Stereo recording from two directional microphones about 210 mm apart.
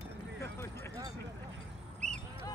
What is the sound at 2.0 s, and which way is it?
Duck, 35° right (ahead or behind).